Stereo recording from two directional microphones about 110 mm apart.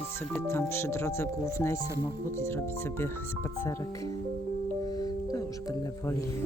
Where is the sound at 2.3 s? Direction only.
25° left (ahead or behind).